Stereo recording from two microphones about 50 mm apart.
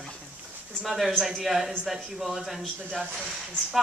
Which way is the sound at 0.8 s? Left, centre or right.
Centre.